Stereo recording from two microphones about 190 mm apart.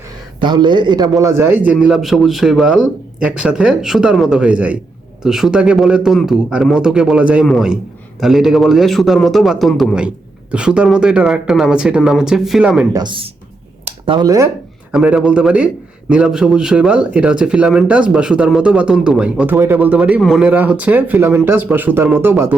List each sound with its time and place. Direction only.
0.3 s a man's voice: 25° right (ahead or behind); by 12.9 s 5° right (ahead or behind)
12.9 s speech: 25° right (ahead or behind)
14.9 s a man's voice: 5° right (ahead or behind)